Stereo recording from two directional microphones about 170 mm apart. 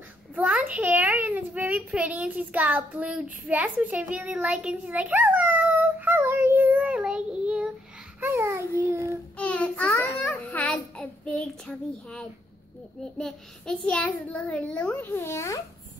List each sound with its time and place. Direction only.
0.4 s a child's voice: 10° right (ahead or behind)
8.2 s babbling: 15° right (ahead or behind)
9.4 s a sound: 10° left (ahead or behind)
13.2 s a child's voice: 5° left (ahead or behind)